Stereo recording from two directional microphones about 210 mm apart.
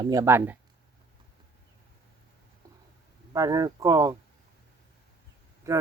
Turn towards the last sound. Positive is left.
turn(degrees=-15)  # may be behind; listen again after turning